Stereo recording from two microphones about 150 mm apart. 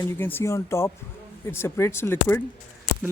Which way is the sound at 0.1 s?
15° left (ahead or behind).